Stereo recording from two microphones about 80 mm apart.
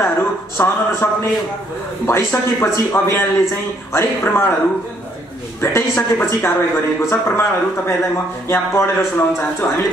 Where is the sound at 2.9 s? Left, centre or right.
Left.